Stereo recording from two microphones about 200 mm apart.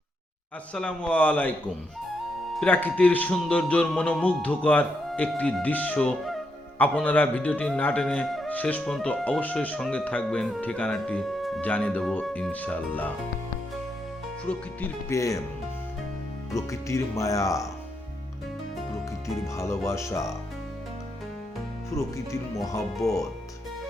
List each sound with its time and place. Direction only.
0.7 s speech: 5° left (ahead or behind)
2.6 s speech: 10° left (ahead or behind)
14.4 s speech: 10° left (ahead or behind)
16.6 s speech: 15° left (ahead or behind)
19.5 s speech: 15° left (ahead or behind)
21.8 s speech: 15° left (ahead or behind)